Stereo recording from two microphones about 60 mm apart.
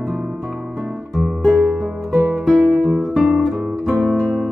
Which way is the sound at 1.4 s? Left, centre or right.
Centre.